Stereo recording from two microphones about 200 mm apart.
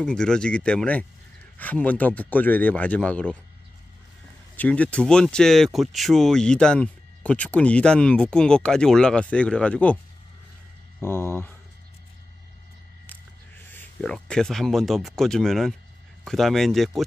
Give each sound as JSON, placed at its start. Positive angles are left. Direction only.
{"t": 0.0, "sound": "speech", "side_deg": 5}
{"t": 4.6, "sound": "speech", "side_deg": 5}
{"t": 11.0, "sound": "speech", "side_deg": 10}
{"t": 13.7, "sound": "speech", "side_deg": 5}